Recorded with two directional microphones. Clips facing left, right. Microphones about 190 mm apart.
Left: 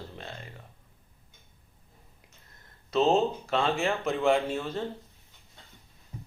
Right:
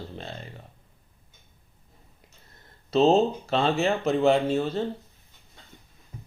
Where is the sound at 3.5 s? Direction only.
25° right (ahead or behind).